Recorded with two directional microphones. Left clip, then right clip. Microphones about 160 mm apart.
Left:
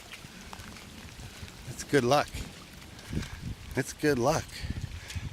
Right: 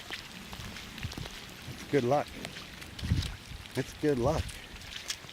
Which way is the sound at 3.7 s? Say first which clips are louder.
Left 2 dB; 20° left (ahead or behind).